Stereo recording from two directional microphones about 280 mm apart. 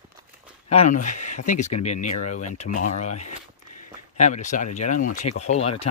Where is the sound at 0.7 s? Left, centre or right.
Left.